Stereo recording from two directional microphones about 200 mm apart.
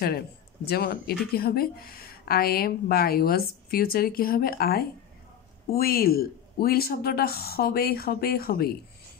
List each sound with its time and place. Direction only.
0.7 s speech: 50° left (ahead or behind)